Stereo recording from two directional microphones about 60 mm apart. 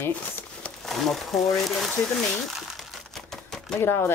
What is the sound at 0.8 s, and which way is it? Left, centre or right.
Speech, centre.